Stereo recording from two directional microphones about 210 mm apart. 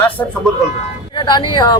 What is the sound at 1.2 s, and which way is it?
Speech, 20° left (ahead or behind).